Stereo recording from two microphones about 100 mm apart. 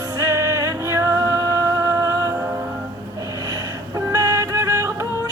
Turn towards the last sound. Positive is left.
turn(degrees=-35)  # may be behind; listen again after turning